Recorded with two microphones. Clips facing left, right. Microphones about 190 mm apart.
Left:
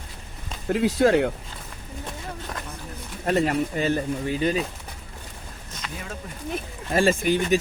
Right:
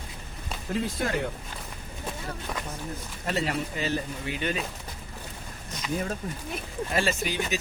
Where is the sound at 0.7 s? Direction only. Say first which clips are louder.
Left 10 dB; 75° left (ahead or behind).